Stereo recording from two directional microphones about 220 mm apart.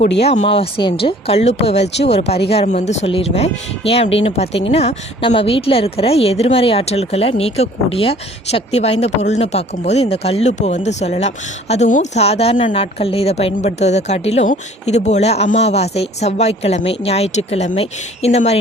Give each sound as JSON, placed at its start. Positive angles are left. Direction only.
{"t": 0.2, "sound": "speech", "side_deg": 30}